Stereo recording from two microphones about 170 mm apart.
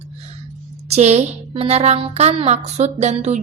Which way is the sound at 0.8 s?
40° right (ahead or behind).